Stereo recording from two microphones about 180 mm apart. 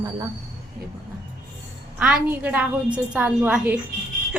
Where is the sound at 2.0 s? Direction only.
5° right (ahead or behind).